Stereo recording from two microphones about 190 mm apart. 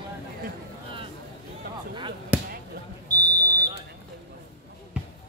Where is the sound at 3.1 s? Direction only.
20° right (ahead or behind).